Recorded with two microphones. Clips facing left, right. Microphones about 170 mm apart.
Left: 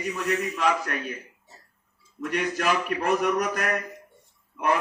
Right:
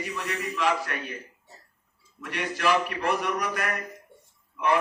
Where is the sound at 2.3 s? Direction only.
45° left (ahead or behind).